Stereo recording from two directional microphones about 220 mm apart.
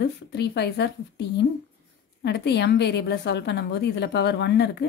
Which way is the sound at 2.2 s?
50° left (ahead or behind).